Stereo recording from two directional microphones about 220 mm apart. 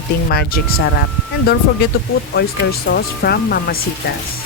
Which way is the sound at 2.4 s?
55° left (ahead or behind).